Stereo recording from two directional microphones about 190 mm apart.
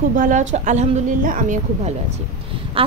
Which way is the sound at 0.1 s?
45° right (ahead or behind).